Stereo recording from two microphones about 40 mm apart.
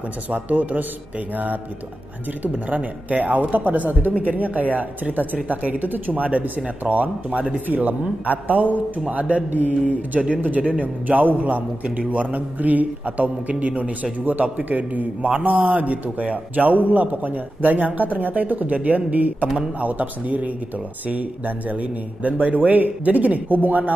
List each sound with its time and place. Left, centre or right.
0.3 s speech: right
14.2 s speech: right